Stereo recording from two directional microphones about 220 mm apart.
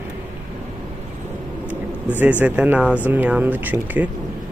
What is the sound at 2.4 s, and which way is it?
Speech, 5° right (ahead or behind).